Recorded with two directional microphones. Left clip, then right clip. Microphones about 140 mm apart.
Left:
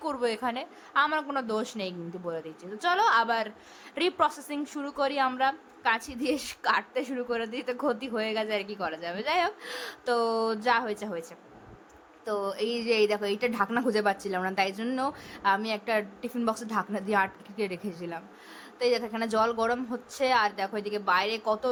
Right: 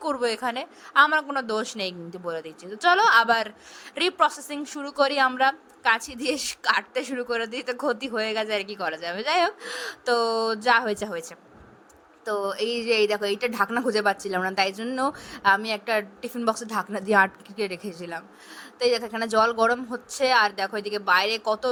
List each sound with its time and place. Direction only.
0.0 s a woman's voice: 35° right (ahead or behind)
12.2 s a woman's voice: 35° right (ahead or behind)